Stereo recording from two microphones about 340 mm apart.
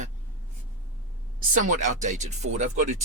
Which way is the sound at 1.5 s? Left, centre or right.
Right.